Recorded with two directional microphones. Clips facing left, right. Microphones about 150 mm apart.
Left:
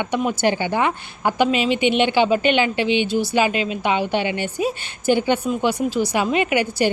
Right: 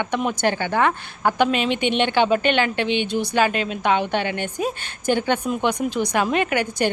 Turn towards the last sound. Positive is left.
turn(degrees=10)  # may be behind; listen again after turning